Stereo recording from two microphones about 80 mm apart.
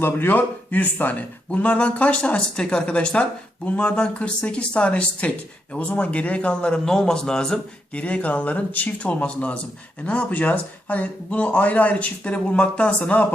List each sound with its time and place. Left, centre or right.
0.0 s a man's voice: left